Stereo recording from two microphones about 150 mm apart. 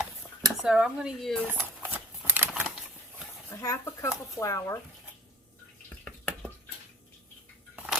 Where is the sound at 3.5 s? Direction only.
20° left (ahead or behind).